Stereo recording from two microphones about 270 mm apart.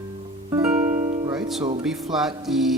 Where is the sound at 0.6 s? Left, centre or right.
Centre.